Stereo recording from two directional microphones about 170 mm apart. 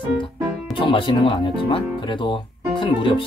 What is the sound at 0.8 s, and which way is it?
Speech, 30° left (ahead or behind).